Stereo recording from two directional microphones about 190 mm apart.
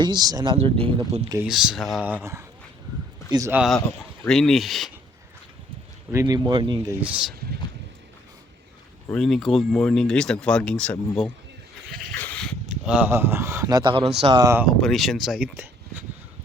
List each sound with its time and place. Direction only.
0.0 s speech: 20° right (ahead or behind)
0.5 s speech: 30° right (ahead or behind)
1.5 s speech: centre (ahead or behind)
3.3 s speech: 15° right (ahead or behind)
3.8 s speech: 5° left (ahead or behind)
6.1 s speech: 20° right (ahead or behind)
7.0 s speech: 5° right (ahead or behind)
9.0 s speech: centre (ahead or behind)
11.9 s dog: centre (ahead or behind)
12.8 s speech: 5° right (ahead or behind); by 14.4 s 30° right (ahead or behind)
14.4 s speech: 10° right (ahead or behind)
14.7 s speech: centre (ahead or behind)